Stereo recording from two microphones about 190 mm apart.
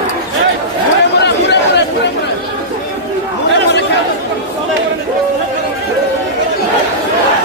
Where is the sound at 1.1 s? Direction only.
65° left (ahead or behind).